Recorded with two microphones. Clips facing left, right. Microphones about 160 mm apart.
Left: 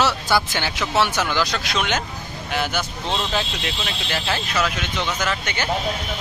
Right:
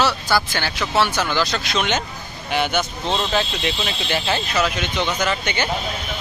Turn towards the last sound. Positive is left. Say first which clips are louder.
# right 3 dB
turn(degrees=5)  # may be behind; listen again after turning